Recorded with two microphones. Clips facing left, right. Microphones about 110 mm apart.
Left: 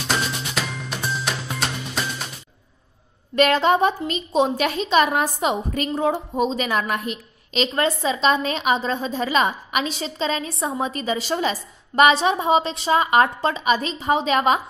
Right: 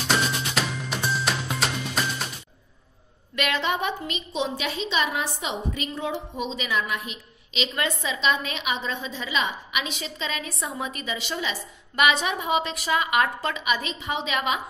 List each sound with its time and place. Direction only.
0.1 s music: centre (ahead or behind)
3.3 s a woman's voice: 40° left (ahead or behind)